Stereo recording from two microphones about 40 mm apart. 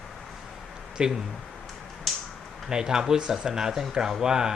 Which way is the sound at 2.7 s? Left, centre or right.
Centre.